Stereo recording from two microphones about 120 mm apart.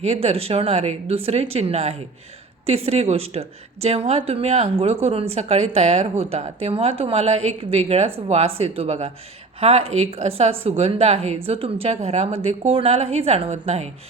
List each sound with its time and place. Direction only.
0.0 s a woman's voice: 60° right (ahead or behind)